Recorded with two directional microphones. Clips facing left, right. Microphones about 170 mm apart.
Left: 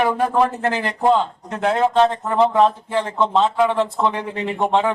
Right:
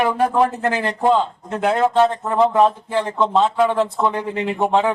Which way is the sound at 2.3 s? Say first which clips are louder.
Even; centre (ahead or behind).